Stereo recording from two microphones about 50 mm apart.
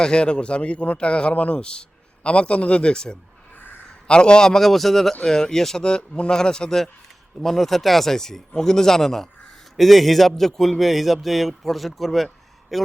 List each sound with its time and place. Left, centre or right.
0.0 s a man's voice: centre